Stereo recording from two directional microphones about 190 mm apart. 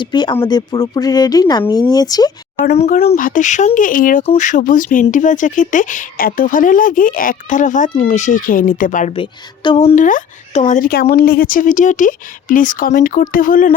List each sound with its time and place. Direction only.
0.0 s speech: 25° left (ahead or behind)
2.7 s speech: 35° left (ahead or behind)
9.1 s speech: 25° left (ahead or behind); by 13.7 s 45° left (ahead or behind)